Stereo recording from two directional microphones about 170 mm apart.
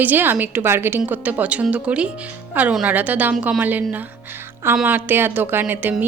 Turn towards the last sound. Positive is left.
turn(degrees=-10)  # may be behind; listen again after turning